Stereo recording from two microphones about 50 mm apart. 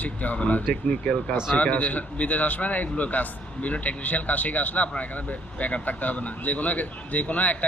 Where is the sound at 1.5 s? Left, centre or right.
Left.